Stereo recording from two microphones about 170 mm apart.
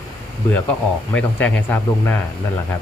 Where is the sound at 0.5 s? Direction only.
10° left (ahead or behind).